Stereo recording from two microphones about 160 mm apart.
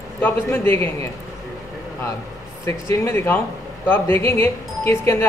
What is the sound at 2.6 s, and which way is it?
Speech, 20° left (ahead or behind).